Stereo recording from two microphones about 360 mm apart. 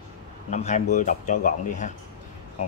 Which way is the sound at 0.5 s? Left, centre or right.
Centre.